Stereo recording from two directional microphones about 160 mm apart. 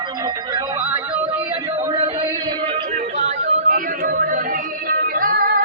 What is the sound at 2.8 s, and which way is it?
Yodeling, 45° right (ahead or behind).